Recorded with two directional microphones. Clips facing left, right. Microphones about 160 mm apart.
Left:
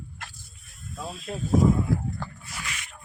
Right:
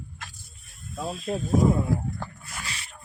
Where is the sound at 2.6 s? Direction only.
35° right (ahead or behind).